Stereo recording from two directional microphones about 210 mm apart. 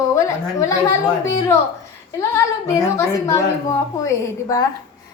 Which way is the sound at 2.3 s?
15° left (ahead or behind).